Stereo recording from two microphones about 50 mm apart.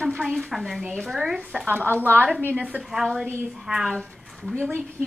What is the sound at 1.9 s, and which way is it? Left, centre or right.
Speech, right.